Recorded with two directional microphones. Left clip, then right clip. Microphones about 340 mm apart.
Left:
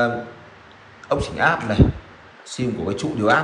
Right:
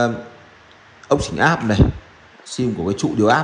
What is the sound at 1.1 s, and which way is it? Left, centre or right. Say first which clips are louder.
A man's voice: right 2 dB; right.